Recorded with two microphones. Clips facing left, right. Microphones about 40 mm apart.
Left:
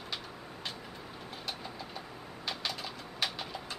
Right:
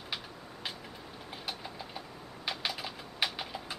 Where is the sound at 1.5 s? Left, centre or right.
Centre.